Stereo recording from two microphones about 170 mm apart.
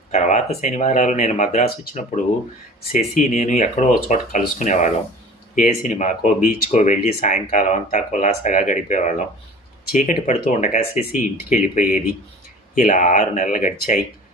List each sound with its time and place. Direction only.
0.1 s speech: 45° left (ahead or behind)